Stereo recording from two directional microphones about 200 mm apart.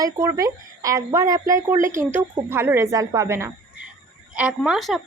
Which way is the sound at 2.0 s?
10° right (ahead or behind).